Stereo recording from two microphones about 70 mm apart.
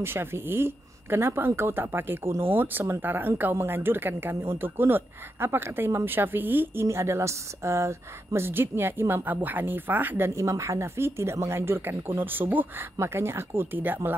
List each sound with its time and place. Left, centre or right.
0.0 s speech: right
6.9 s speech: right
10.3 s speech: right
13.0 s speech: right